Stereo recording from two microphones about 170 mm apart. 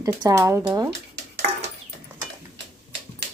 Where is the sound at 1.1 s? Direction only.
80° right.